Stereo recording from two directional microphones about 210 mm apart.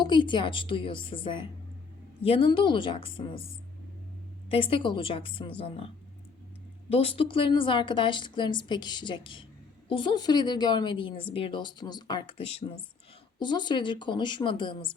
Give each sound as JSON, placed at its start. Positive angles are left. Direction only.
{"t": 0.0, "sound": "a woman's voice", "side_deg": 20}
{"t": 4.4, "sound": "a woman's voice", "side_deg": 25}
{"t": 6.9, "sound": "a woman's voice", "side_deg": 25}